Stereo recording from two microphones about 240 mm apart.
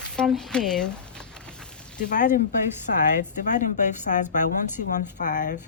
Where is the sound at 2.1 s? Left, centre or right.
Left.